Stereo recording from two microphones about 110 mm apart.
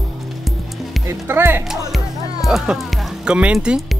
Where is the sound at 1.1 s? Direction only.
20° right (ahead or behind).